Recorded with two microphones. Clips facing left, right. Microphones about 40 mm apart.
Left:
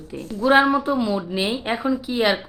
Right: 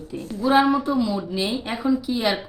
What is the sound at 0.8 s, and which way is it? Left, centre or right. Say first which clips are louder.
Speech: left 1 dB; left.